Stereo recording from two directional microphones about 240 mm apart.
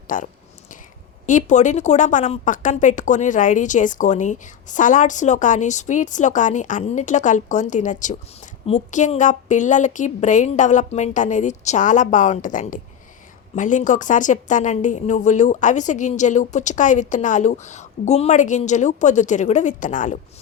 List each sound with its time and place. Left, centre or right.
0.1 s a woman's voice: left
1.3 s a woman's voice: left